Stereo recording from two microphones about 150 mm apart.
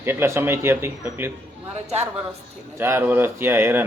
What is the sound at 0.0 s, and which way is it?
Speech, 15° right (ahead or behind).